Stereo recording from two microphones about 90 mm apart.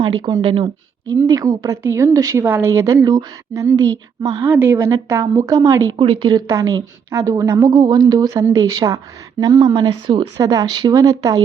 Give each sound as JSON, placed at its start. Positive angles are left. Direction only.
{"t": 0.0, "sound": "speech", "side_deg": -55}
{"t": 0.4, "sound": "speech", "side_deg": -90}
{"t": 1.1, "sound": "a woman's voice", "side_deg": -35}
{"t": 2.4, "sound": "a woman's voice", "side_deg": -25}
{"t": 3.0, "sound": "speech", "side_deg": -50}
{"t": 3.5, "sound": "a woman's voice", "side_deg": -35}
{"t": 4.4, "sound": "a woman's voice", "side_deg": -25}
{"t": 5.9, "sound": "a woman's voice", "side_deg": -60}
{"t": 7.7, "sound": "a woman's voice", "side_deg": -50}
{"t": 9.7, "sound": "speech", "side_deg": -60}
{"t": 10.3, "sound": "a woman's voice", "side_deg": -40}